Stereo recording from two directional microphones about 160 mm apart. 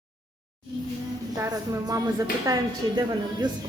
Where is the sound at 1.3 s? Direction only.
20° right (ahead or behind).